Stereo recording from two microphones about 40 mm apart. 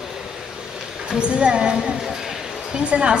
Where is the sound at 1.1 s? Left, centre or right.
Right.